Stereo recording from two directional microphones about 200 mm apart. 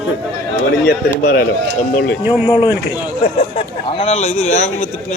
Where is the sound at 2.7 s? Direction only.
10° right (ahead or behind).